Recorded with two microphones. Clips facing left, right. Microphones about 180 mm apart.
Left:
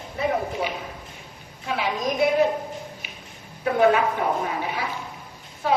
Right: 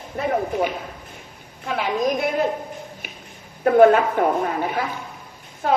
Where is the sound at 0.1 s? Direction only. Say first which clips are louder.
Even; 45° right (ahead or behind).